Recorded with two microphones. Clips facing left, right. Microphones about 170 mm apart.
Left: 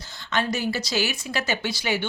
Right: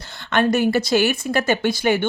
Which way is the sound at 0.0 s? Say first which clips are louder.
Right 7 dB; 60° right (ahead or behind).